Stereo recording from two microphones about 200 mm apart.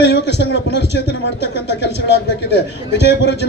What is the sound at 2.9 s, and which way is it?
Speech, 60° left (ahead or behind).